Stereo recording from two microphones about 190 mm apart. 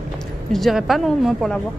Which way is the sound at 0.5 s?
Centre (ahead or behind).